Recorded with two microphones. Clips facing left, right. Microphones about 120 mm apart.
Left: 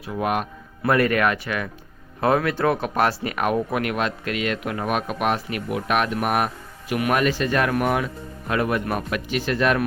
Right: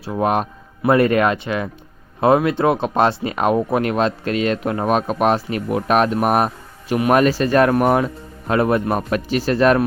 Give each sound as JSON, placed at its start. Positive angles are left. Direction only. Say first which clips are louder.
{"t": 0.0, "sound": "speech", "louder": "right 5 dB", "side_deg": -30}